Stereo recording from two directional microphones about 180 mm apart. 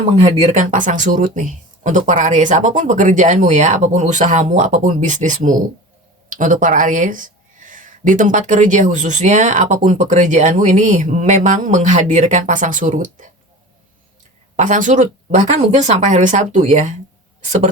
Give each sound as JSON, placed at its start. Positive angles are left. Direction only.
{"t": 0.2, "sound": "speech", "side_deg": -45}
{"t": 14.5, "sound": "speech", "side_deg": -45}